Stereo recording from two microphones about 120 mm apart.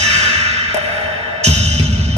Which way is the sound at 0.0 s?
65° right (ahead or behind).